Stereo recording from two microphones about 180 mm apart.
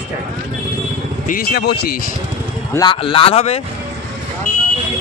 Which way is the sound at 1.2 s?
55° left (ahead or behind).